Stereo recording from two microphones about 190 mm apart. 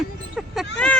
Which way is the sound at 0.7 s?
5° left (ahead or behind).